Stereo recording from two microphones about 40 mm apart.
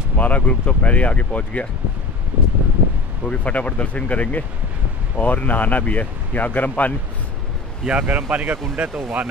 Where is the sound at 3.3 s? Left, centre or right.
Left.